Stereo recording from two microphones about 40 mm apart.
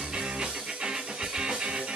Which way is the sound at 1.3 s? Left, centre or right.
Right.